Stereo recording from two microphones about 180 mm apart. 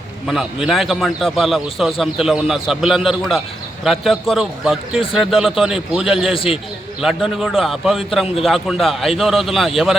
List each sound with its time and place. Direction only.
0.3 s a man's voice: centre (ahead or behind)
6.3 s a man's voice: 30° left (ahead or behind)
7.0 s a man's voice: centre (ahead or behind)